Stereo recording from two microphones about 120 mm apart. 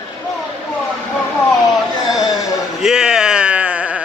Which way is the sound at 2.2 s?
30° left (ahead or behind).